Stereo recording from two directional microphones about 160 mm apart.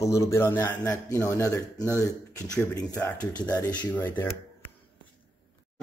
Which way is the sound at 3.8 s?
15° left (ahead or behind).